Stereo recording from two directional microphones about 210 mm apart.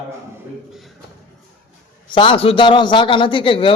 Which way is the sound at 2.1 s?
25° left (ahead or behind).